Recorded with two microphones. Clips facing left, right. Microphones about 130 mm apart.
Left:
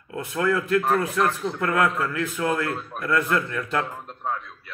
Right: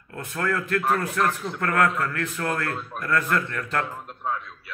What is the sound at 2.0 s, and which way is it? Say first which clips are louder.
Speech: left 1 dB; 5° left (ahead or behind).